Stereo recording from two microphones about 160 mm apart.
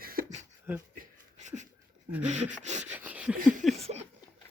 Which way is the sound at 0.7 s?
15° right (ahead or behind).